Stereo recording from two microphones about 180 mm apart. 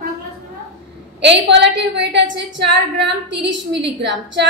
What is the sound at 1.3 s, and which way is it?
A woman's voice, 75° right (ahead or behind).